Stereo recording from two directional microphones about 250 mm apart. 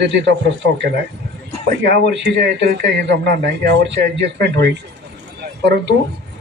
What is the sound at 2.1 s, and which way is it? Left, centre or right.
A man's voice, right.